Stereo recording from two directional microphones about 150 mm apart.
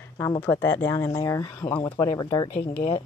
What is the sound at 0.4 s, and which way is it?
Speech, 15° left (ahead or behind).